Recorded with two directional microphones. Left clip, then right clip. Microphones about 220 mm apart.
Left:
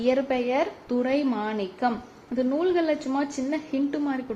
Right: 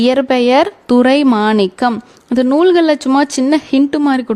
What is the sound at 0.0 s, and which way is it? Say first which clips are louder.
A woman's voice: right 12 dB; 55° right (ahead or behind).